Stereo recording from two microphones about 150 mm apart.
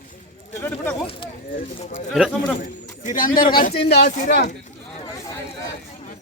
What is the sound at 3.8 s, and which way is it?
Speech, 90° left.